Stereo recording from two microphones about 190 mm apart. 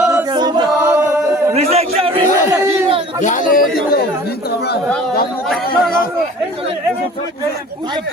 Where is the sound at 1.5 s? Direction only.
35° right (ahead or behind).